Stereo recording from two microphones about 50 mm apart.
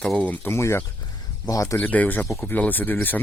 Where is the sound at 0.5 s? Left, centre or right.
Left.